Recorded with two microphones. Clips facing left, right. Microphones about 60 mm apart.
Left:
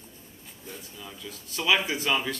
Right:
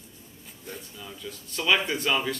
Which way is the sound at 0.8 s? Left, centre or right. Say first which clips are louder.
Right 1 dB; centre.